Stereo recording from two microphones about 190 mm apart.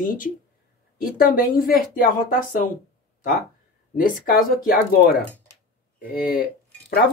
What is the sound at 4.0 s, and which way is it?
Speech, 50° left (ahead or behind).